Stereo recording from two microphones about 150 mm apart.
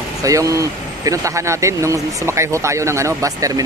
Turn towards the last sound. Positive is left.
turn(degrees=-20)  # may be behind; listen again after turning